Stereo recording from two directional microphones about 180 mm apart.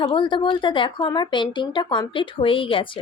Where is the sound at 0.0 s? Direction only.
25° left (ahead or behind).